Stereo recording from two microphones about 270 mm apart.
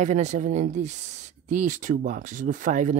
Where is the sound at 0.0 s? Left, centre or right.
Right.